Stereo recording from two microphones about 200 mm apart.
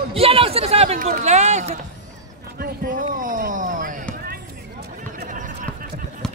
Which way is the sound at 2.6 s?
45° right (ahead or behind).